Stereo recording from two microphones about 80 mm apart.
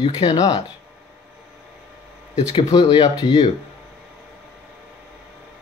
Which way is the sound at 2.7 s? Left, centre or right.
Left.